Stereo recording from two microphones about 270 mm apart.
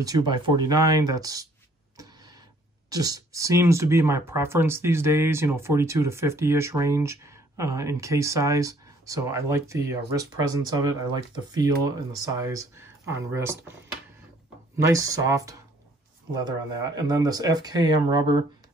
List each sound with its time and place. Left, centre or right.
0.0 s speech: centre
2.9 s speech: centre
14.8 s speech: centre